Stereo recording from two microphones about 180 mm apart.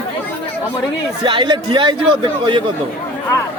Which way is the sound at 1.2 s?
25° right (ahead or behind).